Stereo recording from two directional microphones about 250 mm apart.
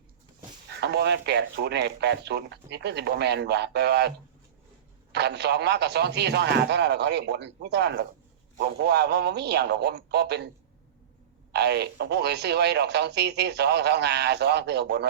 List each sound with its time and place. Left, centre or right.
0.8 s speech: right
5.1 s speech: right
11.5 s speech: right